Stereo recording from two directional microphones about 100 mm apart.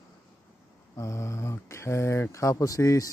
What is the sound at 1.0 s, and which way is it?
Speech, 30° left (ahead or behind).